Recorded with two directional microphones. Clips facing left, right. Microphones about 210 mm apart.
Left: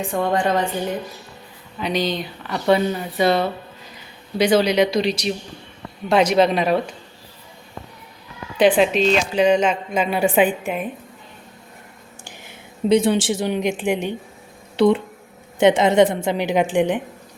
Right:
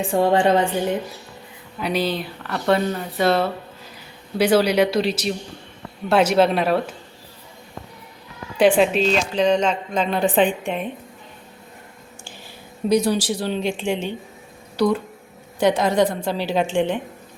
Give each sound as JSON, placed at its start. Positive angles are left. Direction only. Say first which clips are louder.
{"t": 0.0, "sound": "a woman's voice", "louder": "right 3 dB", "side_deg": -30}
{"t": 1.8, "sound": "speech", "louder": "even", "side_deg": -5}
{"t": 8.7, "sound": "a woman's voice", "louder": "left 1 dB", "side_deg": 0}
{"t": 12.5, "sound": "a woman's voice", "louder": "left 2 dB", "side_deg": 25}